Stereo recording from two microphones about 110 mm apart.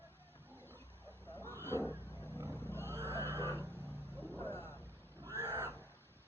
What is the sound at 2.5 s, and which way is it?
Wild animals, 20° left (ahead or behind).